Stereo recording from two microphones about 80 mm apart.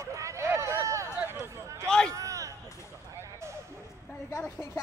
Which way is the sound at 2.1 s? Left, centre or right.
Right.